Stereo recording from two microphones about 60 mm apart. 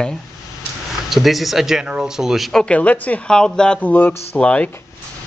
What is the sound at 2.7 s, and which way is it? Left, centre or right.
A woman's voice, left.